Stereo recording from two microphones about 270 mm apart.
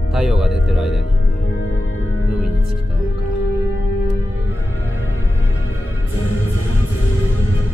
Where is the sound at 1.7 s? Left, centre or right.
Left.